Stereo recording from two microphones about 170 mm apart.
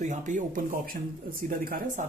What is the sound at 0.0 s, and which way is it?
Speech, 45° right (ahead or behind).